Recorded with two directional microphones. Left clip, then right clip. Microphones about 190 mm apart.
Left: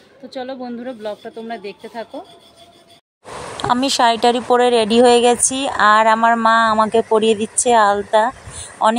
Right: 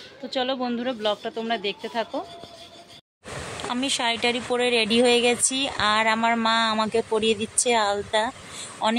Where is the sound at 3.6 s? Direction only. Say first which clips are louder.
Left 11 dB; 30° left (ahead or behind).